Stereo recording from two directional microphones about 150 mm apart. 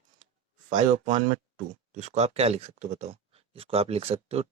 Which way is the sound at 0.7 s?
55° right (ahead or behind).